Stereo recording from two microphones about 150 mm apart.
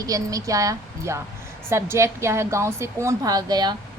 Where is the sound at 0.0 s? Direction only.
25° right (ahead or behind).